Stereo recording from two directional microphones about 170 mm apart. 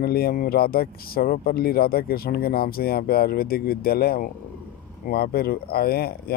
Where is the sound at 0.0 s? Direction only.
65° left (ahead or behind).